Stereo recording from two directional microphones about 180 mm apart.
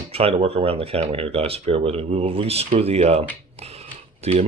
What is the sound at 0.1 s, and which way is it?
Speech, 35° right (ahead or behind).